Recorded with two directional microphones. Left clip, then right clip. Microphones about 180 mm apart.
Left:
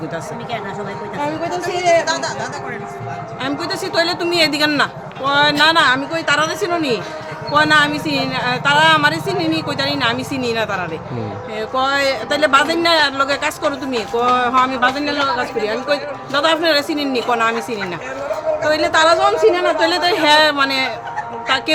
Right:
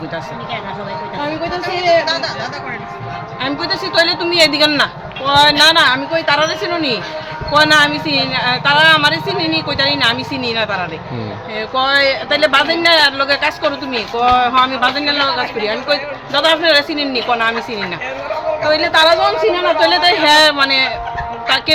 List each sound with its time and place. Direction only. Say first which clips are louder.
3.4 s a woman's voice: right 4 dB; 15° left (ahead or behind)
18.6 s a woman's voice: right 3 dB; 15° left (ahead or behind)